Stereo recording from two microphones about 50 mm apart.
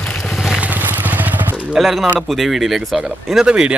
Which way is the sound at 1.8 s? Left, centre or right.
Centre.